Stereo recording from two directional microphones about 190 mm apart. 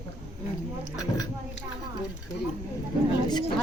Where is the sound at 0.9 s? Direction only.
20° left (ahead or behind).